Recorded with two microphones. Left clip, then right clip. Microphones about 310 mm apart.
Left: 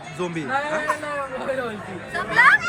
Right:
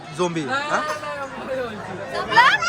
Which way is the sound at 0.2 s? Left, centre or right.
Centre.